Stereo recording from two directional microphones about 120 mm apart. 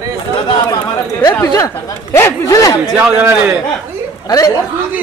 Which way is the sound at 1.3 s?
25° left (ahead or behind).